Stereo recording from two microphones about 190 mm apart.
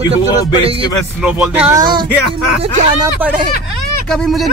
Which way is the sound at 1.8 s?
25° right (ahead or behind).